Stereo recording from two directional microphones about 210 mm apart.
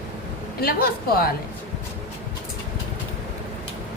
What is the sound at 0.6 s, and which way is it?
Speech, 45° left (ahead or behind).